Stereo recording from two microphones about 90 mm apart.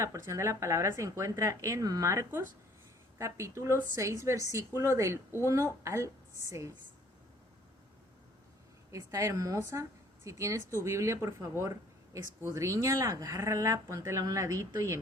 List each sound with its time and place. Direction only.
0.0 s speech: 35° right (ahead or behind)
8.9 s speech: 35° right (ahead or behind)